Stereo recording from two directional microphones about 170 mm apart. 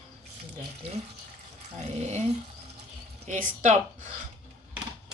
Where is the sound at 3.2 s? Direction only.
45° right (ahead or behind).